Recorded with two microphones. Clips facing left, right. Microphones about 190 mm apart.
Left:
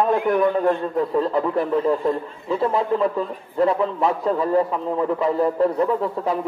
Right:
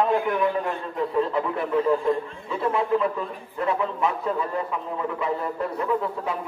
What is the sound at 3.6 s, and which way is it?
A man's voice, 35° left (ahead or behind).